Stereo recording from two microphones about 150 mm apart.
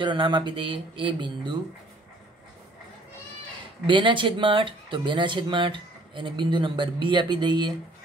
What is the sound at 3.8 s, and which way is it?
Speech, 35° right (ahead or behind).